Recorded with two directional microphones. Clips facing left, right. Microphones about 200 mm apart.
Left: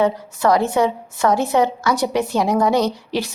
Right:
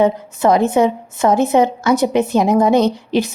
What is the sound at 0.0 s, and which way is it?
A woman's voice, 20° right (ahead or behind).